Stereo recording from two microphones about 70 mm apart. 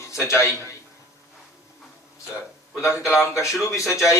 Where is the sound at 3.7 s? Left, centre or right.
Left.